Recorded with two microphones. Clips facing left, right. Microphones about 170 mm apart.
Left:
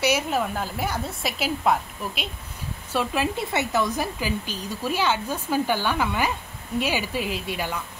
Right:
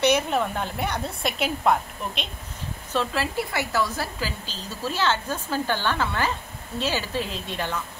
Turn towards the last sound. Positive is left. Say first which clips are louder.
# left 1 dB
turn(degrees=10)  # may be behind; listen again after turning